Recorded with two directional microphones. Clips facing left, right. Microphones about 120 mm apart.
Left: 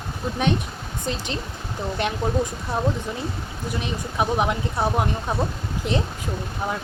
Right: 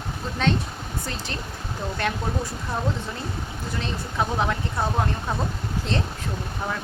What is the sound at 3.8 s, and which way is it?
Speech, 15° left (ahead or behind).